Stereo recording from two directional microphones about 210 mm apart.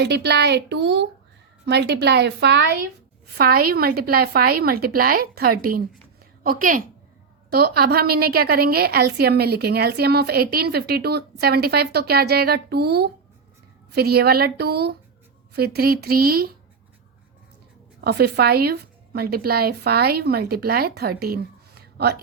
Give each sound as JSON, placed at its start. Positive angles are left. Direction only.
{"t": 0.0, "sound": "a woman's voice", "side_deg": -50}
{"t": 18.0, "sound": "a woman's voice", "side_deg": -50}
{"t": 21.8, "sound": "a sound", "side_deg": -50}